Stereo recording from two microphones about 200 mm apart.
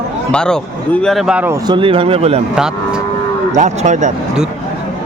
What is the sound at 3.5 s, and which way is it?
Speech, 35° right (ahead or behind).